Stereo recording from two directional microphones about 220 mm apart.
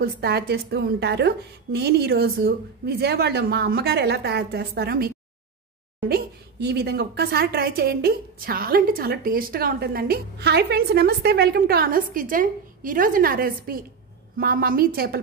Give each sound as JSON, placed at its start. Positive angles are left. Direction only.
{"t": 0.0, "sound": "a woman's voice", "side_deg": -45}